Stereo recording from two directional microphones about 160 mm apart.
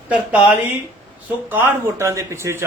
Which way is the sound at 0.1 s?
10° right (ahead or behind).